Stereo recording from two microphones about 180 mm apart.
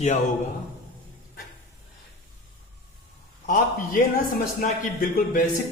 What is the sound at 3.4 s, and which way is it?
A man's voice, 50° left (ahead or behind).